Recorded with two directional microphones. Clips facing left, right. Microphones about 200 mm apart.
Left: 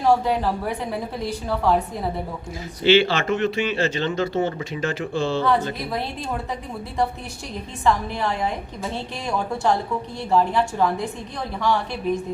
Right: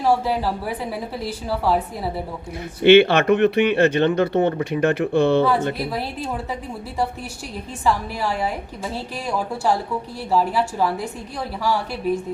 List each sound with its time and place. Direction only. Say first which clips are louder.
0.0 s a woman's voice: left 1 dB; 5° right (ahead or behind)
2.8 s speech: right 5 dB; 60° right (ahead or behind)
7.9 s a woman's voice: even; 5° right (ahead or behind)